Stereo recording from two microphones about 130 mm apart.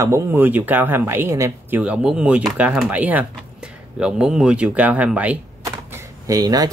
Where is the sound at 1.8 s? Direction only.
10° right (ahead or behind).